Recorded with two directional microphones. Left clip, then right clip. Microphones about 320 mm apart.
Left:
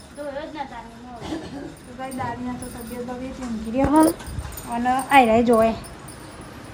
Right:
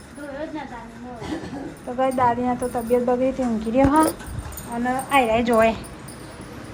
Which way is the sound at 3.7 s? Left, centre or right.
Centre.